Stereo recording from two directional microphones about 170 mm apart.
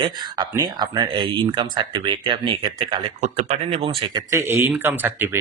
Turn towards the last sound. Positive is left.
turn(degrees=-10)  # may be behind; listen again after turning